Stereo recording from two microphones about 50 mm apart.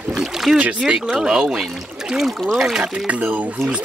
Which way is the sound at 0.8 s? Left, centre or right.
Centre.